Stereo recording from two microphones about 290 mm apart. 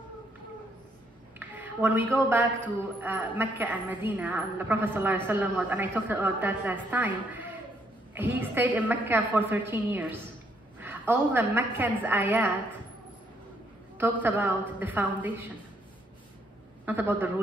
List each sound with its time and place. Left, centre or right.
1.4 s a sound: centre
2.1 s a woman's voice: centre
14.2 s a woman's voice: centre
16.8 s a woman's voice: centre